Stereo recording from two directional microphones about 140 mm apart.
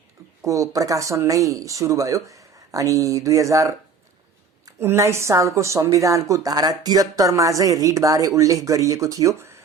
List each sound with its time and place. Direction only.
0.4 s a woman's voice: 25° right (ahead or behind)